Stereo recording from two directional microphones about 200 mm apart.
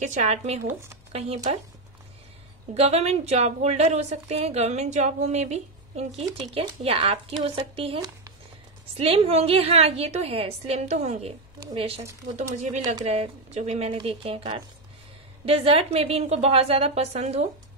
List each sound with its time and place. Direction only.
0.0 s a woman's voice: 35° right (ahead or behind)
2.7 s a woman's voice: 30° right (ahead or behind)